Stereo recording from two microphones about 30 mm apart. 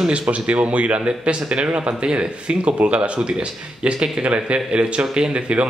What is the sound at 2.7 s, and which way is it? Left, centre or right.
A man's voice, right.